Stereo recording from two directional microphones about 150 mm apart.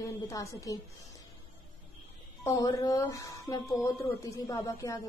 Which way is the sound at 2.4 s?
25° left (ahead or behind).